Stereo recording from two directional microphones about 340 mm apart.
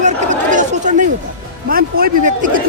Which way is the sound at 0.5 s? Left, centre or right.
Right.